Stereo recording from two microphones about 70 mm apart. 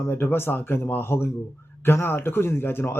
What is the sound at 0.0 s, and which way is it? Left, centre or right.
A man's voice, left.